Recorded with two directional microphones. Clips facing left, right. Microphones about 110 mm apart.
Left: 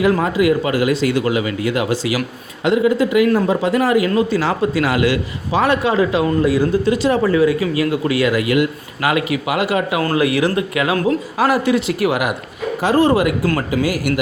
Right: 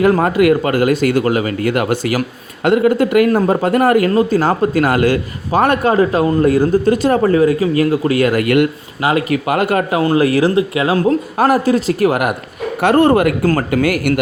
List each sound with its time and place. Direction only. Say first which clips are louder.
0.0 s a man's voice: right 3 dB; 50° right (ahead or behind)
9.0 s speech: right 2 dB; 30° right (ahead or behind)
9.3 s a man's voice: right 3 dB; 50° right (ahead or behind)
10.5 s speech: right 4 dB; 30° right (ahead or behind)
11.3 s a man's voice: right 2 dB; 45° right (ahead or behind)
12.8 s a man's voice: right 3 dB; 60° right (ahead or behind)